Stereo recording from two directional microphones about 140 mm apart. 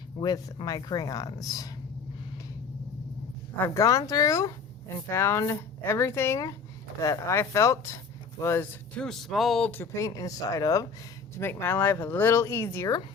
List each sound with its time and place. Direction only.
0.2 s speech: 25° left (ahead or behind)
3.6 s speech: 25° left (ahead or behind)
9.0 s speech: centre (ahead or behind)
9.8 s speech: 20° left (ahead or behind)